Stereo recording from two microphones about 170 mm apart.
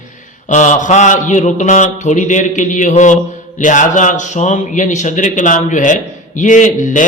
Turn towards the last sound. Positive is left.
turn(degrees=50)  # may be behind; listen again after turning